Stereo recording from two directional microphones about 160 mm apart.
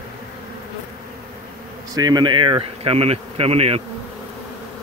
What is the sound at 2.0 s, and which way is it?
Speech, 25° right (ahead or behind).